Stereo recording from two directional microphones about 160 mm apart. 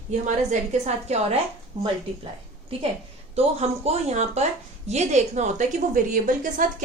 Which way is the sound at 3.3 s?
40° right (ahead or behind).